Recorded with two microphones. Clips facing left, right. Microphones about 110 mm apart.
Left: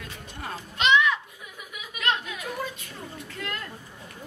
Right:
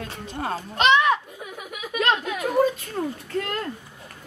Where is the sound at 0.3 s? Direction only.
35° right (ahead or behind).